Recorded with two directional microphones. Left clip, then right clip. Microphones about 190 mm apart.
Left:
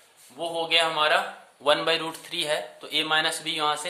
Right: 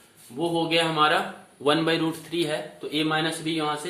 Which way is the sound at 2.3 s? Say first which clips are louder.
Even; 40° left (ahead or behind).